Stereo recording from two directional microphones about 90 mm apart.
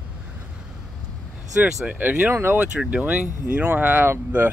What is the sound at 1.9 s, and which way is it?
Speech, 20° right (ahead or behind).